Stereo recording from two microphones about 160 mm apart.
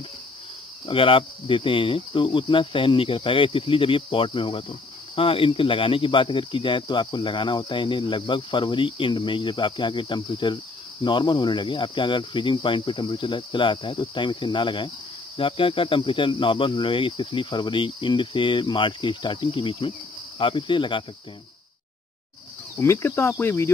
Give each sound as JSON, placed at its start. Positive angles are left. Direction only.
{"t": 0.8, "sound": "speech", "side_deg": 35}
{"t": 22.8, "sound": "speech", "side_deg": 15}